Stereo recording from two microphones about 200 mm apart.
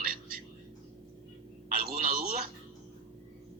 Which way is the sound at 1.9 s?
45° right (ahead or behind).